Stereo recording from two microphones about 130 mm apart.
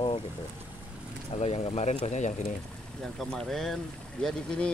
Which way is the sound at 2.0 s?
65° left (ahead or behind).